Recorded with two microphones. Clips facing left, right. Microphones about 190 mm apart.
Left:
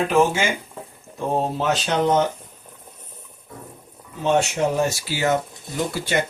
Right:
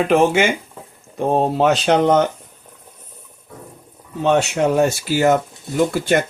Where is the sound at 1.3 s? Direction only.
70° right (ahead or behind).